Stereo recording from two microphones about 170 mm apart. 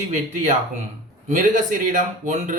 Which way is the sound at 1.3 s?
50° right (ahead or behind).